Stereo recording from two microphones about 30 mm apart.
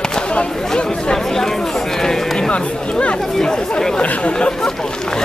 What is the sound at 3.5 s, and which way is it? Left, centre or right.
Chatter, left.